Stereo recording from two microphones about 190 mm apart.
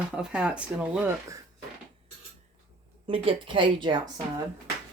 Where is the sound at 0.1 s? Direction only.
5° right (ahead or behind).